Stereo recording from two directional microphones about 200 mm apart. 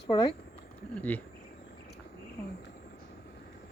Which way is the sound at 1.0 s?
10° left (ahead or behind).